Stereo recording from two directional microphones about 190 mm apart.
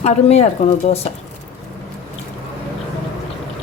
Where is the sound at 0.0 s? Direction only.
35° left (ahead or behind).